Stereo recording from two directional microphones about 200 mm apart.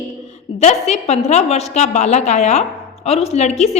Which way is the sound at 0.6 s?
35° left (ahead or behind).